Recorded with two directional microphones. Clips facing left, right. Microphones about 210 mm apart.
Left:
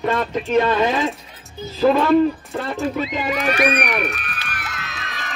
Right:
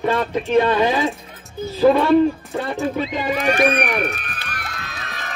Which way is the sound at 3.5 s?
45° right (ahead or behind).